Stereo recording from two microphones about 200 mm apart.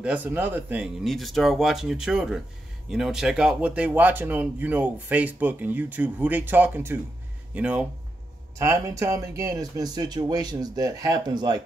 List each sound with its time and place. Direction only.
0.0 s speech: 10° right (ahead or behind)